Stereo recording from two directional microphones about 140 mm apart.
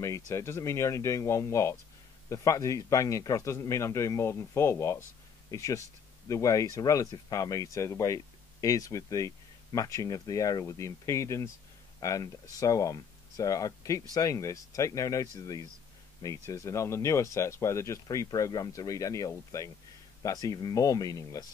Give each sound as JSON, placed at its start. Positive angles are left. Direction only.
{"t": 0.0, "sound": "speech", "side_deg": 20}